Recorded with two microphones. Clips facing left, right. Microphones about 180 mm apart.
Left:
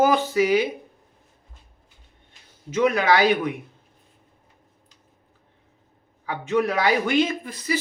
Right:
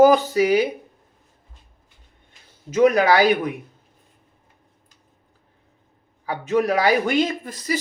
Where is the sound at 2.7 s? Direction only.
40° right (ahead or behind).